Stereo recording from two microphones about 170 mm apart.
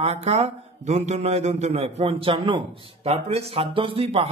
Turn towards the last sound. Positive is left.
turn(degrees=-35)  # may be behind; listen again after turning